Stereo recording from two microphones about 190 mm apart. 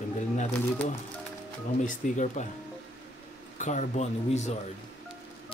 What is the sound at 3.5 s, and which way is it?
Speech, 40° left (ahead or behind).